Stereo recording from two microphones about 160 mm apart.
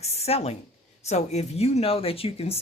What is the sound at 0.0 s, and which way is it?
Speech, 40° left (ahead or behind).